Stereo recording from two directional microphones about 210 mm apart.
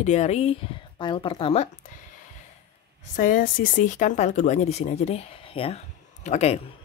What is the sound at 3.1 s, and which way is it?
Speech, 40° left (ahead or behind).